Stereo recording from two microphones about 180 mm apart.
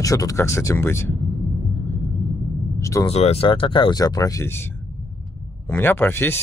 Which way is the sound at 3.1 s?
35° left (ahead or behind).